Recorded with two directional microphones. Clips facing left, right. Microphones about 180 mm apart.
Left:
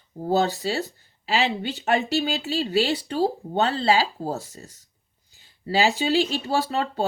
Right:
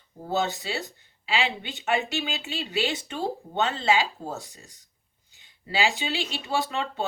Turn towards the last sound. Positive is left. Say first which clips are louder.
# left 4 dB
turn(degrees=40)  # may be behind; listen again after turning